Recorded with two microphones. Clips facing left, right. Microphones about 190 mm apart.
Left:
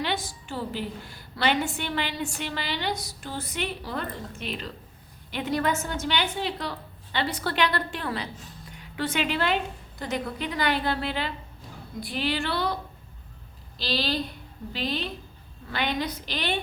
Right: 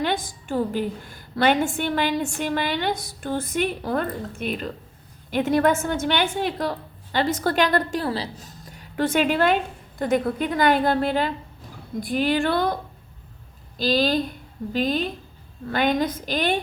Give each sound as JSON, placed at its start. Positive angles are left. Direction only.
{"t": 0.0, "sound": "a woman's voice", "side_deg": -50}